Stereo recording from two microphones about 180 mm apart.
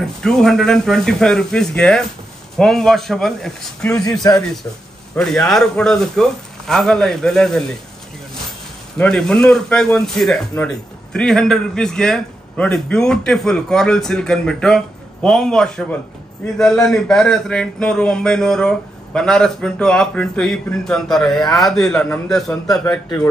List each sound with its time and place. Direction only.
0.0 s a man's voice: 5° left (ahead or behind)
4.0 s speech: 20° left (ahead or behind)
5.1 s a man's voice: 5° left (ahead or behind)
8.9 s a man's voice: 5° left (ahead or behind)